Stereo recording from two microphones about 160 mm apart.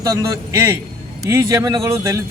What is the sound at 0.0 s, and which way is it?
A man's voice, 20° right (ahead or behind).